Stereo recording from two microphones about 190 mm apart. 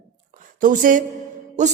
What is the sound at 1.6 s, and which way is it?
Speech, 40° right (ahead or behind).